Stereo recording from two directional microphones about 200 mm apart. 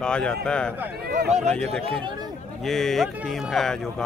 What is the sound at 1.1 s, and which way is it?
Speech, 40° right (ahead or behind).